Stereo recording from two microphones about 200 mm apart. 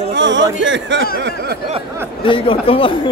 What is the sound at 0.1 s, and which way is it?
Speech, 65° right (ahead or behind).